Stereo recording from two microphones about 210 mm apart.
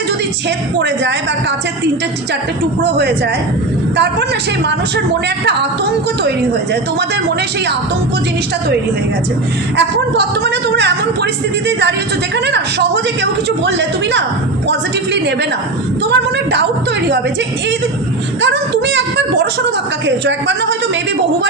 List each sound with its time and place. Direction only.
0.8 s a woman's voice: 55° right (ahead or behind)
3.9 s a woman's voice: 55° right (ahead or behind)
9.7 s a woman's voice: 55° right (ahead or behind)
12.5 s a woman's voice: 55° right (ahead or behind)
18.4 s a woman's voice: 55° right (ahead or behind)